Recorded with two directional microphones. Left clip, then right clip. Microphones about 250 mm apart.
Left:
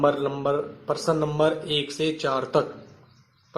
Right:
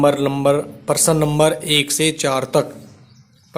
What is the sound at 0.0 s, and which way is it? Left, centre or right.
Speech, right.